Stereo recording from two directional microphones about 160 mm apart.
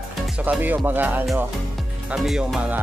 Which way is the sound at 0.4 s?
10° right (ahead or behind).